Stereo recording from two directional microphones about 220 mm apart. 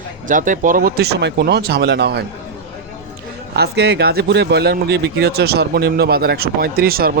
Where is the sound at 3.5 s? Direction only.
45° right (ahead or behind).